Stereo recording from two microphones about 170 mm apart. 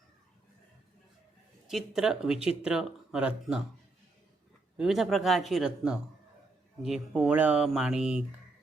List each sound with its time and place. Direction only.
1.6 s speech: 5° right (ahead or behind)
4.8 s speech: centre (ahead or behind)